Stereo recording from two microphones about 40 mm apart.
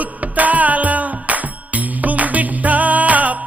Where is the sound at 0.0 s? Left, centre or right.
Right.